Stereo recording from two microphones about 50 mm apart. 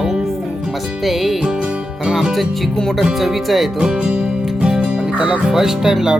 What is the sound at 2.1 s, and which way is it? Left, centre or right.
Music, centre.